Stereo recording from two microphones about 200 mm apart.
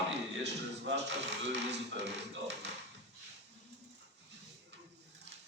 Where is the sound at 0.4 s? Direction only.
60° right (ahead or behind).